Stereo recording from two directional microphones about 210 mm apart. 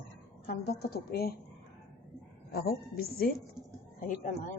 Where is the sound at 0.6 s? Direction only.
50° left (ahead or behind).